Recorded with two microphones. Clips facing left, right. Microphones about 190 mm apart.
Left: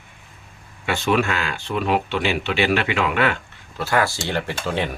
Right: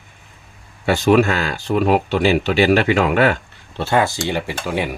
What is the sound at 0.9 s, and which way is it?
Speech, 40° right (ahead or behind).